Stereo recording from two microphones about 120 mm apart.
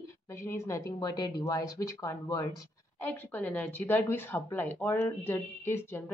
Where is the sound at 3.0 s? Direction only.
15° left (ahead or behind).